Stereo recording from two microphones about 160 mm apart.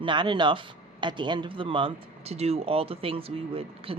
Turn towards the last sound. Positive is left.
turn(degrees=-35)  # may be behind; listen again after turning